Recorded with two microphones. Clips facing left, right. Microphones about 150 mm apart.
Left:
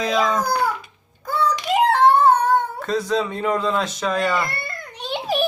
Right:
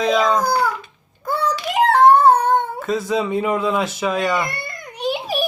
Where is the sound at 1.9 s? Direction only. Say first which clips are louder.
Right 4 dB; 45° right (ahead or behind).